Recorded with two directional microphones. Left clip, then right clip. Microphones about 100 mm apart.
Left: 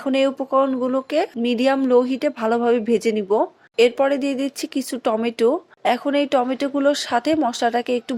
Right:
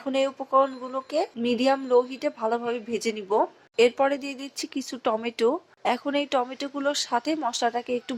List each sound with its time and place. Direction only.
0.0 s speech: 35° left (ahead or behind)